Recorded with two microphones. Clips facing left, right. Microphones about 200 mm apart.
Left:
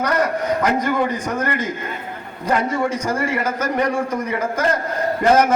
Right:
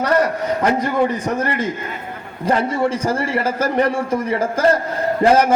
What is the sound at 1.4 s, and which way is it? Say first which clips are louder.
A man's voice: right 2 dB; 30° right (ahead or behind).